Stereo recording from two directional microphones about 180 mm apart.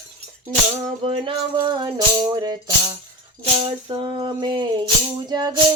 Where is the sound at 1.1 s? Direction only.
25° right (ahead or behind).